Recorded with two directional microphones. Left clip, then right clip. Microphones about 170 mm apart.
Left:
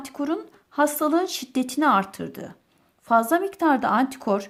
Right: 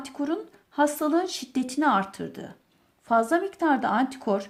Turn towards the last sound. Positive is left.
turn(degrees=35)  # may be behind; listen again after turning